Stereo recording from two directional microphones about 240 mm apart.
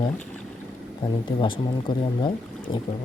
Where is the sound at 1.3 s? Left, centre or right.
Left.